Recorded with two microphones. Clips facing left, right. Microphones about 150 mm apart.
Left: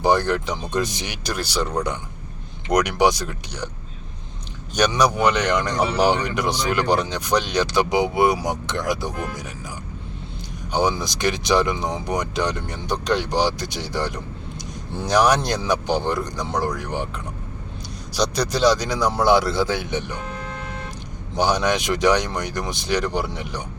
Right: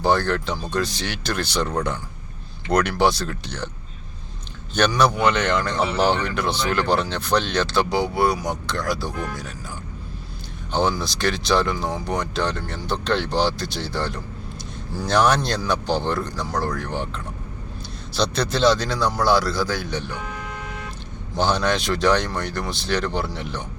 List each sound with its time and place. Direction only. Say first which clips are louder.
0.0 s speech: left 1 dB; 15° left (ahead or behind)
4.9 s speech: even; 10° left (ahead or behind)
10.7 s speech: left 1 dB; 15° left (ahead or behind)
18.1 s a man's voice: left 1 dB; 10° left (ahead or behind)
21.3 s speech: left 1 dB; 15° left (ahead or behind)